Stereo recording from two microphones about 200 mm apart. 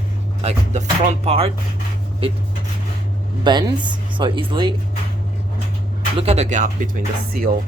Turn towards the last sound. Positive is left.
turn(degrees=-45)  # may be behind; listen again after turning